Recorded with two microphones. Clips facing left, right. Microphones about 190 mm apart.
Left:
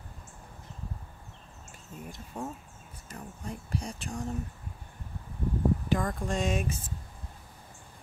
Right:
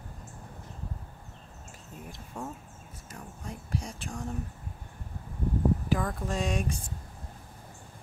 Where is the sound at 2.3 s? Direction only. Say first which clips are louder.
Left 1 dB; 20° left (ahead or behind).